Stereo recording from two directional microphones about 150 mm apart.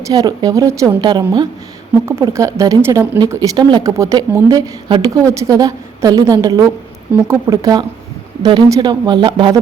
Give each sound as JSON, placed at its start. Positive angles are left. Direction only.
{"t": 0.1, "sound": "a woman's voice", "side_deg": -25}